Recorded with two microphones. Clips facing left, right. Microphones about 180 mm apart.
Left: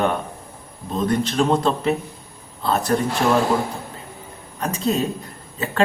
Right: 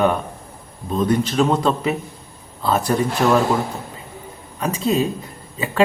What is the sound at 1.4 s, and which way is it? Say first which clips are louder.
Speech: right 1 dB; 5° right (ahead or behind).